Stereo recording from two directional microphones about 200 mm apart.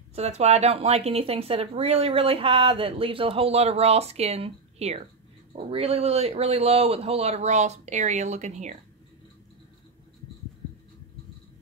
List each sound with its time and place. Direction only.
0.1 s a man's voice: 35° right (ahead or behind)